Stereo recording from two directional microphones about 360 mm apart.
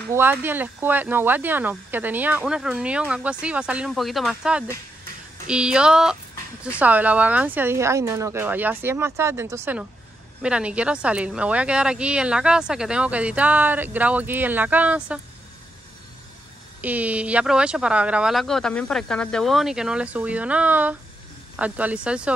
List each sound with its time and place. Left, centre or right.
0.1 s speech: centre
16.8 s speech: centre